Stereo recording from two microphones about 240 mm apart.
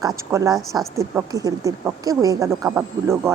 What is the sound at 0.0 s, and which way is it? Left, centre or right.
Speech, centre.